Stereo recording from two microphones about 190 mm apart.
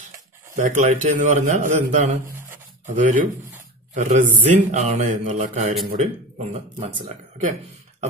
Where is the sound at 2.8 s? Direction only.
45° right (ahead or behind).